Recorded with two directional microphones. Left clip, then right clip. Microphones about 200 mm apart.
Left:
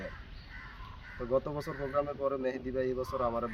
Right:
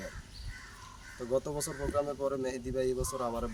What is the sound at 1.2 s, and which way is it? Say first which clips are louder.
Speech: left 1 dB; 5° right (ahead or behind).